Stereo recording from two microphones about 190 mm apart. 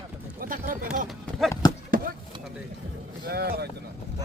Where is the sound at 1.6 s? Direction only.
20° left (ahead or behind).